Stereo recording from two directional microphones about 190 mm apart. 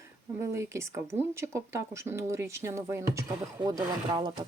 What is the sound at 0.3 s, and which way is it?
Speech, 15° right (ahead or behind).